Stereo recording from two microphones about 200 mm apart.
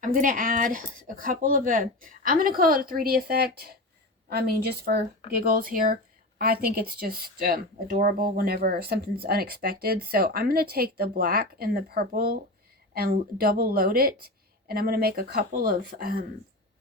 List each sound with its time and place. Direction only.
0.0 s speech: 40° right (ahead or behind)